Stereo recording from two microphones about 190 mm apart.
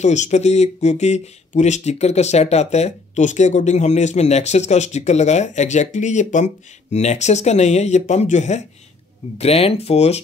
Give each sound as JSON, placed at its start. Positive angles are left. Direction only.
{"t": 0.0, "sound": "speech", "side_deg": 40}